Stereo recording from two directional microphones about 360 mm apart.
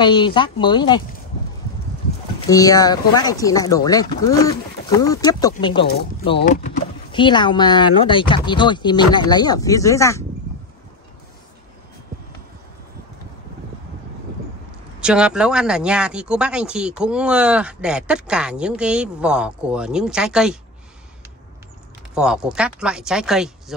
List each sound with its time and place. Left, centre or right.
0.0 s speech: centre
2.5 s speech: centre
15.0 s speech: centre
22.1 s speech: centre